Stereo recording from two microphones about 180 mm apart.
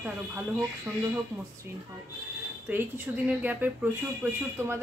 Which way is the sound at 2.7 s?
10° right (ahead or behind).